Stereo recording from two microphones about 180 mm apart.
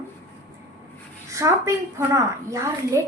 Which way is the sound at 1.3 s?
15° right (ahead or behind).